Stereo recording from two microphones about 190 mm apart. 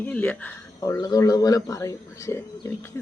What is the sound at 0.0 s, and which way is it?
Speech, 10° left (ahead or behind).